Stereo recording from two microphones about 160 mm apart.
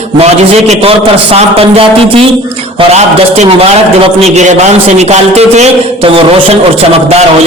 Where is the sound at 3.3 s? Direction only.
45° right (ahead or behind).